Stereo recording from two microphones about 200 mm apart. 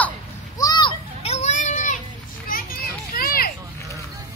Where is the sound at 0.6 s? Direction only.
20° left (ahead or behind); by 3.5 s 45° left (ahead or behind).